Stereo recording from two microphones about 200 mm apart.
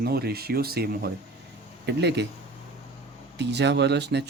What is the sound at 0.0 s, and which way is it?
Speech, 50° right (ahead or behind).